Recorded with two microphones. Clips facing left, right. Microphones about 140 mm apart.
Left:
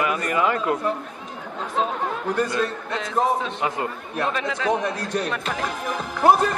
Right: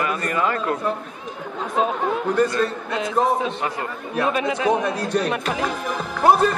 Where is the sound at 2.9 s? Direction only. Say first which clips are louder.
Right 2 dB; 10° right (ahead or behind).